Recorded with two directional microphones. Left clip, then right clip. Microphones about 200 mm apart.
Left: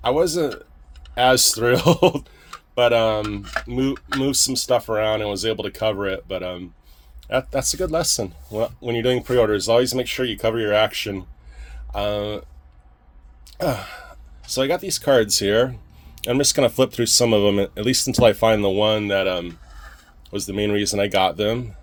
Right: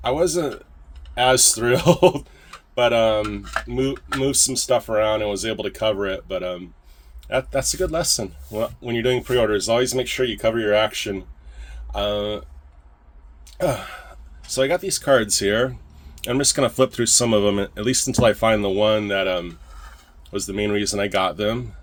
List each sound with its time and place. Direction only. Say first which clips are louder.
0.0 s speech: left 1 dB; 35° left (ahead or behind)
13.6 s speech: right 1 dB; 35° left (ahead or behind)